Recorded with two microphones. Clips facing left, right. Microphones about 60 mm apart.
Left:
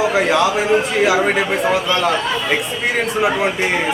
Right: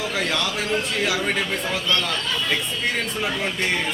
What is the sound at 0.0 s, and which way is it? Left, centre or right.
Speech, centre.